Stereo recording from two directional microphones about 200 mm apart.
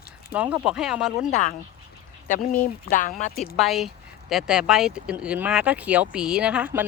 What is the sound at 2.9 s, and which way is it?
Speech, 40° left (ahead or behind).